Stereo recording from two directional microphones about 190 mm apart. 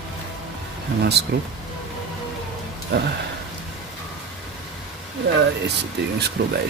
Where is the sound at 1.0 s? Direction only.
60° right (ahead or behind).